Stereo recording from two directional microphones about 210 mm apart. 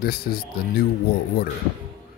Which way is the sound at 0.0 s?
45° left (ahead or behind).